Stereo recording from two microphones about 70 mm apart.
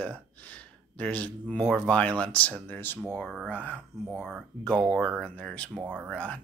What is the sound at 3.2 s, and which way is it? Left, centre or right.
Speech, centre.